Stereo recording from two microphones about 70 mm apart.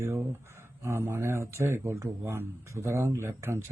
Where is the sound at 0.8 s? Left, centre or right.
Right.